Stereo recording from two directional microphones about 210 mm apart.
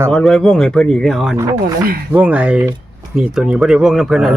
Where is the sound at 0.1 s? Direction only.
5° left (ahead or behind).